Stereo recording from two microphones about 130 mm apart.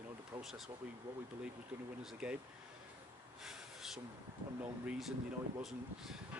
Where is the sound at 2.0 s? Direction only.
5° right (ahead or behind).